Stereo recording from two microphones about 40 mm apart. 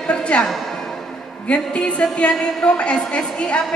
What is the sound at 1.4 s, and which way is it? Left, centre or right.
A woman's voice, left.